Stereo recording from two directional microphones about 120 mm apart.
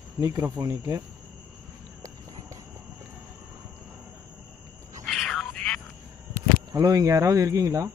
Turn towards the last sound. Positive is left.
turn(degrees=-25)  # may be behind; listen again after turning